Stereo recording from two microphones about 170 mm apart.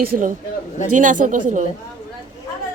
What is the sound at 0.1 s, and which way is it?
Speech, 50° right (ahead or behind).